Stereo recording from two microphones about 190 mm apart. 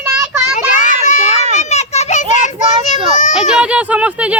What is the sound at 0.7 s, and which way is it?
Children playing, 40° left (ahead or behind).